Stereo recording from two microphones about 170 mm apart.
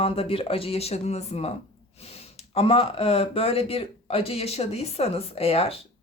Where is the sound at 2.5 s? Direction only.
35° left (ahead or behind).